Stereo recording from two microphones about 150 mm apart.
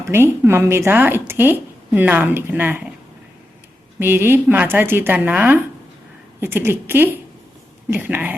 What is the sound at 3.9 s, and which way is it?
A woman's voice, 15° right (ahead or behind).